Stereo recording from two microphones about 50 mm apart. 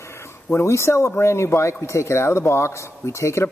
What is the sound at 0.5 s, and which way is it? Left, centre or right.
Speech, left.